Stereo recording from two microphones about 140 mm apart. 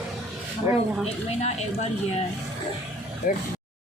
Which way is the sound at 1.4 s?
50° left (ahead or behind).